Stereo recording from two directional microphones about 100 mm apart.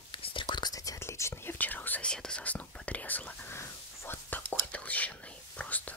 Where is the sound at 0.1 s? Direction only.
60° left (ahead or behind).